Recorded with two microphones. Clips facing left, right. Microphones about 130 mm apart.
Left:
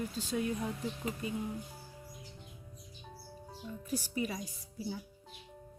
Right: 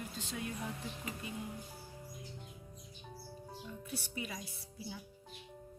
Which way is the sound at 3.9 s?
40° left (ahead or behind).